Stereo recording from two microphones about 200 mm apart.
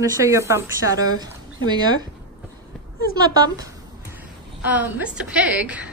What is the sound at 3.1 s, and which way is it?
Speech, 20° right (ahead or behind).